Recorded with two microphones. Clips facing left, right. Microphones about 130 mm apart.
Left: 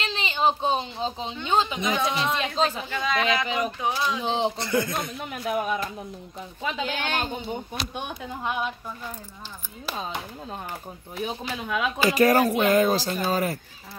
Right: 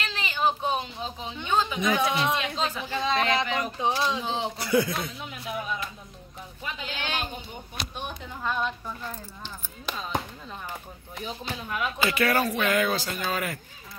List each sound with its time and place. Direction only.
0.0 s speech: 25° left (ahead or behind)
2.3 s speech: 35° left (ahead or behind)
2.9 s speech: 25° right (ahead or behind)
3.4 s speech: 15° left (ahead or behind)
3.8 s speech: 25° right (ahead or behind)
4.2 s speech: 30° left (ahead or behind)
4.6 s a man's voice: 5° right (ahead or behind)
5.1 s speech: 55° left (ahead or behind)
6.9 s speech: 55° left (ahead or behind)
7.8 s speech: 40° left (ahead or behind)
8.4 s speech: 15° left (ahead or behind)
9.9 s speech: 50° left (ahead or behind)
11.2 s speech: 80° left
12.1 s speech: 40° left (ahead or behind)